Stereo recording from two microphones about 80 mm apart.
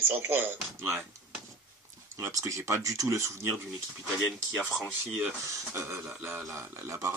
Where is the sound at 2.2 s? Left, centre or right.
Right.